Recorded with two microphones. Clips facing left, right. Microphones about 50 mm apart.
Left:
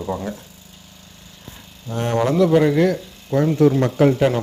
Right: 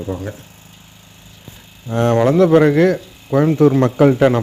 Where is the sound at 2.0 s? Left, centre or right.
Right.